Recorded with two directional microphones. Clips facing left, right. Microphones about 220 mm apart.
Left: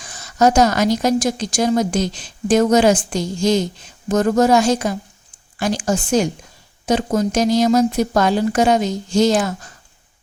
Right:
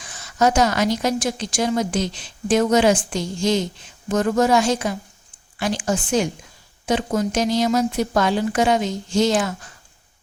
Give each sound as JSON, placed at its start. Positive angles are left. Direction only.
{"t": 0.0, "sound": "a woman's voice", "side_deg": 40}